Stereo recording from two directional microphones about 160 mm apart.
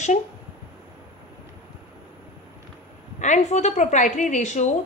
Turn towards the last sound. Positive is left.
turn(degrees=50)  # may be behind; listen again after turning